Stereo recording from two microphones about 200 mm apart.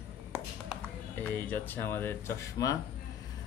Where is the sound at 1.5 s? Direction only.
10° left (ahead or behind).